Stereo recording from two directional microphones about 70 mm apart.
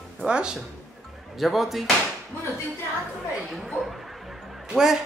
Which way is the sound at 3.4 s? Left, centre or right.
Centre.